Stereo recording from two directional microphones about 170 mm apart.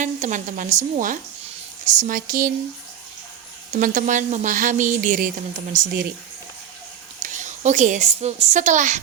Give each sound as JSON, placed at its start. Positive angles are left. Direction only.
{"t": 0.0, "sound": "a woman's voice", "side_deg": -45}
{"t": 3.7, "sound": "a woman's voice", "side_deg": -50}
{"t": 7.2, "sound": "a woman's voice", "side_deg": -45}